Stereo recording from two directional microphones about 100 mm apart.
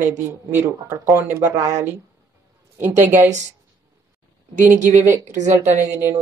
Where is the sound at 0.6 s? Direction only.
20° right (ahead or behind).